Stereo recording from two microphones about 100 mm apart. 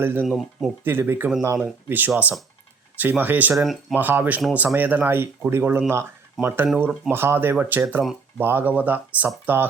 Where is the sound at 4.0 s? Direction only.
20° right (ahead or behind).